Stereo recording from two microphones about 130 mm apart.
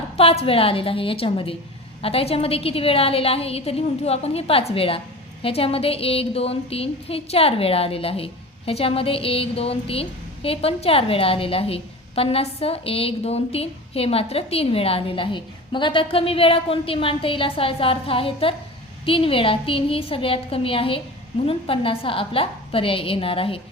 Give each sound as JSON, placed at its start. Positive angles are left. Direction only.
{"t": 0.2, "sound": "a woman's voice", "side_deg": 50}